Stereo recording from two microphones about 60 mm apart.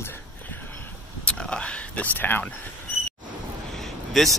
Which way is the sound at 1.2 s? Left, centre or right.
Left.